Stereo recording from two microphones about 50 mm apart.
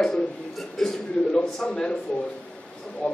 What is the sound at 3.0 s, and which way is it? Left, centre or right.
Speech, left.